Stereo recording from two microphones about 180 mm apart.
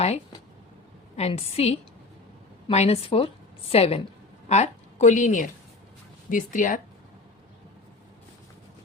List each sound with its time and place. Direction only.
1.1 s a woman's voice: 35° left (ahead or behind)